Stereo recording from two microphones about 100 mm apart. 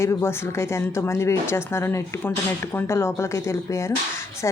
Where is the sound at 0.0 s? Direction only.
25° left (ahead or behind).